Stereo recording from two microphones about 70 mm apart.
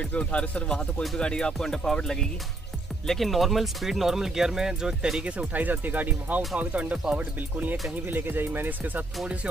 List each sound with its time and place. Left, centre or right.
0.1 s speech: centre; by 9.0 s right